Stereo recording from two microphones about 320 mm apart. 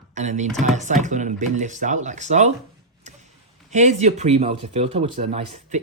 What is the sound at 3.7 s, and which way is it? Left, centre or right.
Speech, right.